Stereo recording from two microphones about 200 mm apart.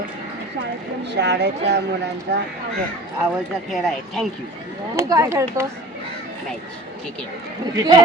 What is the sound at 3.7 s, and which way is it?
Speech, centre (ahead or behind).